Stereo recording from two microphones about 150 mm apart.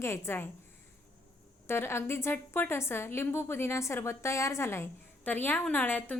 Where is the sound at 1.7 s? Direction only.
15° left (ahead or behind).